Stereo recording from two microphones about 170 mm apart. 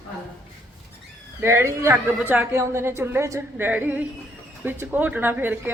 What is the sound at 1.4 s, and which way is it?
A woman's voice, 15° right (ahead or behind).